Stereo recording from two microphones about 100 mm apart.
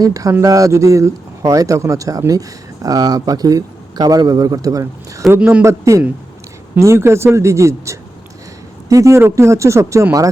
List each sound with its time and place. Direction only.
0.0 s speech: 35° right (ahead or behind)
5.4 s speech: 10° right (ahead or behind)
5.6 s speech: 30° right (ahead or behind)